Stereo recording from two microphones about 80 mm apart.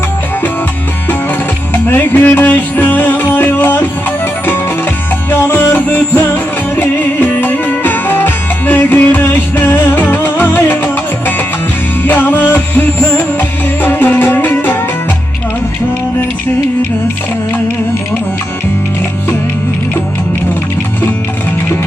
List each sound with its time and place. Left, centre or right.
1.7 s music: left
5.3 s music: left